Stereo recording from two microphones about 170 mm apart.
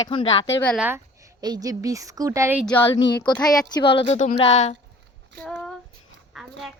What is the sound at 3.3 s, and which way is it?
Speech, 25° left (ahead or behind).